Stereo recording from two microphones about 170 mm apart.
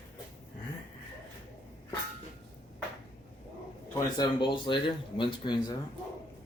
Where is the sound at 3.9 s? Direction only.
25° left (ahead or behind).